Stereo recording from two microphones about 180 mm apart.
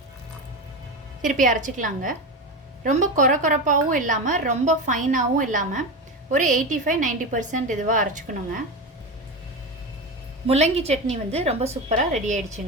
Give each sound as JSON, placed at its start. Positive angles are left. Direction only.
{"t": 1.2, "sound": "a woman's voice", "side_deg": -45}
{"t": 10.4, "sound": "a woman's voice", "side_deg": -35}